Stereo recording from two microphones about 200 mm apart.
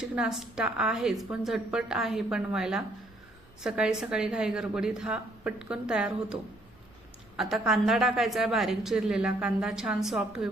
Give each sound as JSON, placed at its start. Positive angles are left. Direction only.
{"t": 0.0, "sound": "a woman's voice", "side_deg": 0}